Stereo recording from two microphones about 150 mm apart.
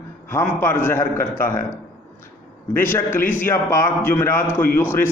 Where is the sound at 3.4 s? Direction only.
15° left (ahead or behind).